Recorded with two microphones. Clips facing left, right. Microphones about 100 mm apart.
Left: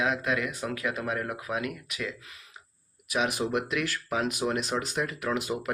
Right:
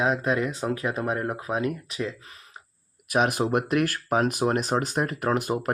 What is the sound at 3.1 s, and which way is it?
Speech, 50° right (ahead or behind).